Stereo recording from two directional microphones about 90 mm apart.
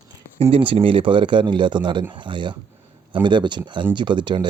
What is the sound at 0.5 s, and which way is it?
Speech, 85° right.